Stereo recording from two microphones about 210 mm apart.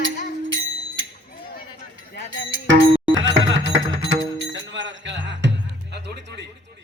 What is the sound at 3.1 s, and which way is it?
Music, 65° right (ahead or behind).